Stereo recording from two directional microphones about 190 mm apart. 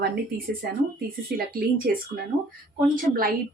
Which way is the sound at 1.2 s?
50° right (ahead or behind).